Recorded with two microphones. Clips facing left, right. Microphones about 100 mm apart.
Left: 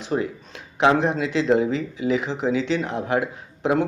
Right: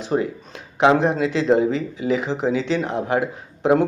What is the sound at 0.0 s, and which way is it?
Speech, 35° right (ahead or behind).